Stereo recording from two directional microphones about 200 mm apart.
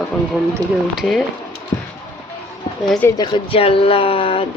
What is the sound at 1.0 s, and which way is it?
Speech, centre (ahead or behind).